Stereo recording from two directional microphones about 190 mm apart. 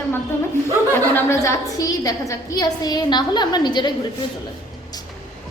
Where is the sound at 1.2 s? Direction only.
15° left (ahead or behind).